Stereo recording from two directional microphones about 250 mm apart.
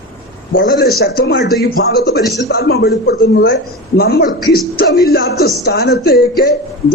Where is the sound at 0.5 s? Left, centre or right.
Left.